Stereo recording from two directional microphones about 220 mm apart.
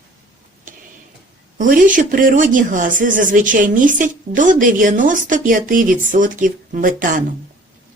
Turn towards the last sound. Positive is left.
turn(degrees=-40)  # may be behind; listen again after turning